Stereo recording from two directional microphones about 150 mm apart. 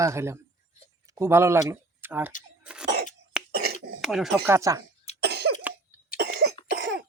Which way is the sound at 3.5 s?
90° right.